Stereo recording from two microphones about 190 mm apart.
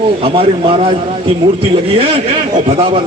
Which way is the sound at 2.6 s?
30° right (ahead or behind).